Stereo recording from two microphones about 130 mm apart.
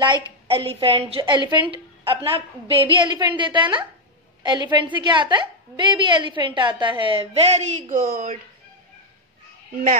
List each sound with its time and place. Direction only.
0.0 s a woman's voice: 40° right (ahead or behind); by 8.4 s 90° right